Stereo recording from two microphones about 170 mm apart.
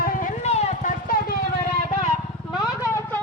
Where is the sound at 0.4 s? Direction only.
40° left (ahead or behind).